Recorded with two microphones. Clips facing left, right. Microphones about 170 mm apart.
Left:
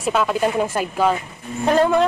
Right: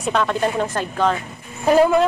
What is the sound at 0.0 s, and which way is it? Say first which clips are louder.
Speech: left 1 dB; 5° left (ahead or behind).